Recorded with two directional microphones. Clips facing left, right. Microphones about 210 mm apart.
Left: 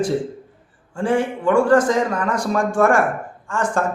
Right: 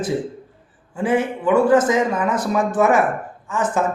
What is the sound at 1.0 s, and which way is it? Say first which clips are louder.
Speech: even; 5° right (ahead or behind).